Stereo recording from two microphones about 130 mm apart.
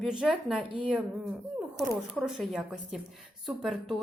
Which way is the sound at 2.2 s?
Centre (ahead or behind).